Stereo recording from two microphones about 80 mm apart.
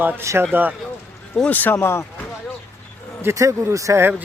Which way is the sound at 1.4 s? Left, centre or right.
Left.